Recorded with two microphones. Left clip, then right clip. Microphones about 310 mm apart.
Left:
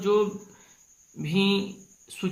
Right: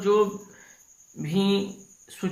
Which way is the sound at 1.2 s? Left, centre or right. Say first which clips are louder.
Even; centre.